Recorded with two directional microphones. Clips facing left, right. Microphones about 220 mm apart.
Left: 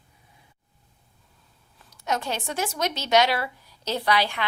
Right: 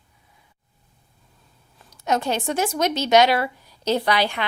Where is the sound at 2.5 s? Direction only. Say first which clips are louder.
Right 6 dB; 50° right (ahead or behind).